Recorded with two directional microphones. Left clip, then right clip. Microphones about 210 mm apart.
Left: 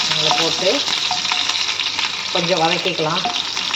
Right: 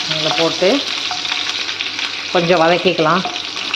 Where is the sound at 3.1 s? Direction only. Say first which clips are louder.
Right 1 dB; centre (ahead or behind).